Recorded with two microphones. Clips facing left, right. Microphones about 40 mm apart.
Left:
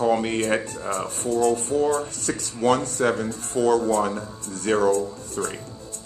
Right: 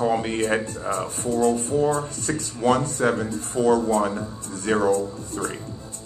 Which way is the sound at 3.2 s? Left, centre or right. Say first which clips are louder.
Right 1 dB; left.